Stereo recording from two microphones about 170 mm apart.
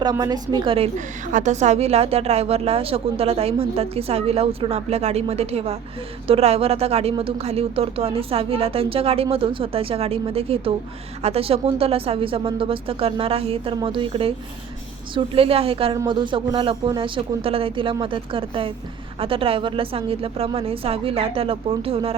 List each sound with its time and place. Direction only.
0.0 s a woman's voice: 20° right (ahead or behind)
0.9 s a woman's voice: 45° right (ahead or behind)